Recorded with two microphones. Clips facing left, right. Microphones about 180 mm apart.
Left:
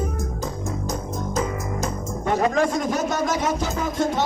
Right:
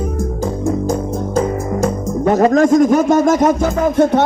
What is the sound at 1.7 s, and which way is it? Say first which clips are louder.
Speech: right 10 dB; 50° right (ahead or behind).